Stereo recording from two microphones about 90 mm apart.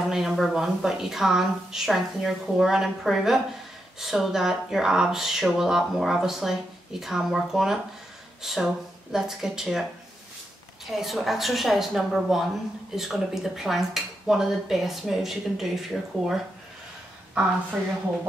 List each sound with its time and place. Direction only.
0.1 s speech: 5° right (ahead or behind)
10.9 s speech: 5° right (ahead or behind)